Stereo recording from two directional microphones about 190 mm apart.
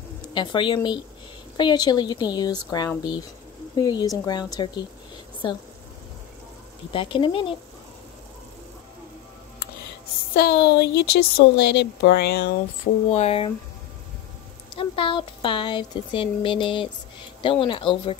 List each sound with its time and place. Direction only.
0.3 s speech: 25° left (ahead or behind)
6.9 s speech: 25° left (ahead or behind)
10.3 s a woman's voice: 60° left (ahead or behind)
13.1 s speech: 35° left (ahead or behind)
14.8 s speech: 25° left (ahead or behind)